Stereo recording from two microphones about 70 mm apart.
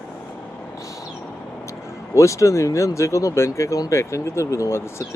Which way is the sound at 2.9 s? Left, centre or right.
Left.